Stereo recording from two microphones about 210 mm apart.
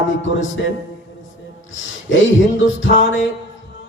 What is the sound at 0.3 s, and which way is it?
Speech, 65° left (ahead or behind).